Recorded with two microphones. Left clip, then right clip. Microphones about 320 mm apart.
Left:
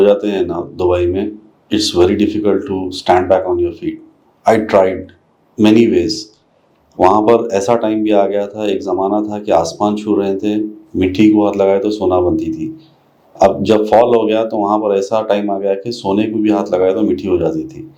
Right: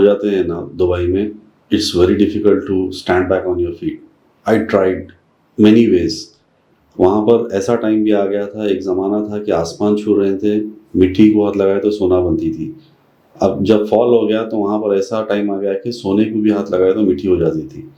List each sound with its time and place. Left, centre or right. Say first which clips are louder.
0.0 s speech: left 1 dB; left